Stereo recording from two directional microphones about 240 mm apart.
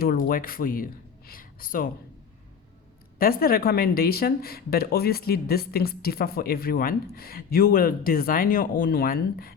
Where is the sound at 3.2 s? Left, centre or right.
Left.